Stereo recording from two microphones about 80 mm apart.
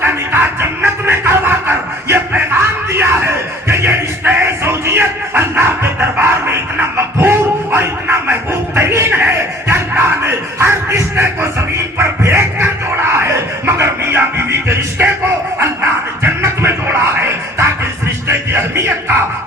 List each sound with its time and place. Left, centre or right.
0.0 s music: right
11.9 s a sound: right
18.3 s music: right